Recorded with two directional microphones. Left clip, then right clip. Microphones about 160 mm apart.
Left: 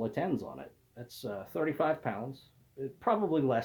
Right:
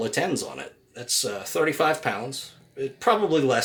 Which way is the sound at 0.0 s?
15° right (ahead or behind).